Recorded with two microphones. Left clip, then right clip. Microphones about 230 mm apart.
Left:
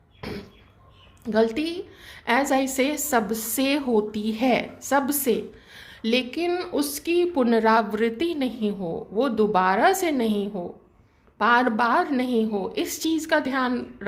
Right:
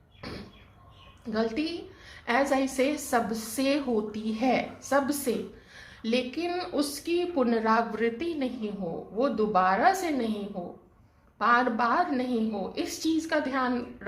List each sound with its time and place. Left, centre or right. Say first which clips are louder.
0.2 s a sound: left 6 dB; left
1.2 s a woman's voice: left 7 dB; left
11.3 s a woman's voice: left 4 dB; left